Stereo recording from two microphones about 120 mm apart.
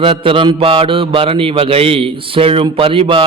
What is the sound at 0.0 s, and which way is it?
A man's voice, 50° right (ahead or behind).